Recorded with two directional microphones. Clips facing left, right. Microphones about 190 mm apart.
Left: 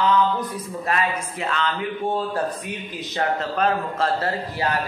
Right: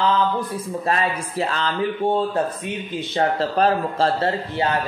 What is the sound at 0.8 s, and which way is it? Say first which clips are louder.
Speech: right 1 dB; 35° right (ahead or behind).